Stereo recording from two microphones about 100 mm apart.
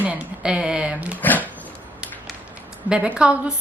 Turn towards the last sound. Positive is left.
turn(degrees=-10)  # may be behind; listen again after turning